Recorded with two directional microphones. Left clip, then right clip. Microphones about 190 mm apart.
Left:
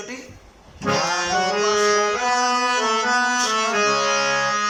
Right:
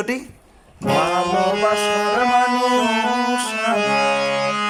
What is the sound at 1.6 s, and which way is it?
Music, 30° right (ahead or behind).